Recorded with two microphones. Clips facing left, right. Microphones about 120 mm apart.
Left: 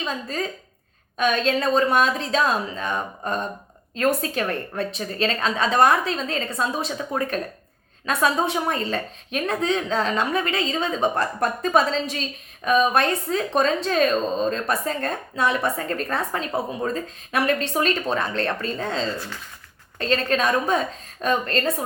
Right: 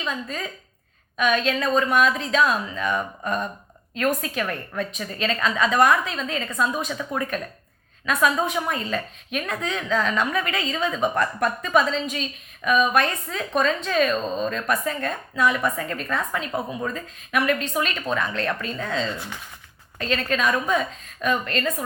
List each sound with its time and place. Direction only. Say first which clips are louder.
0.0 s a woman's voice: left 2 dB; 35° left (ahead or behind)